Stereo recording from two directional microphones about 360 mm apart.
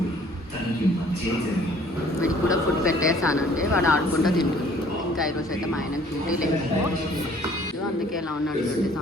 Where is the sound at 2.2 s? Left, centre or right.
Centre.